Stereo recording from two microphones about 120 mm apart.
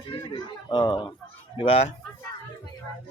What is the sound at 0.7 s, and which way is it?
Speech, 40° left (ahead or behind).